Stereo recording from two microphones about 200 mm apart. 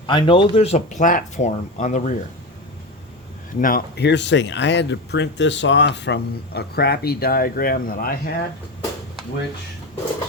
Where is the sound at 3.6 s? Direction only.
45° left (ahead or behind).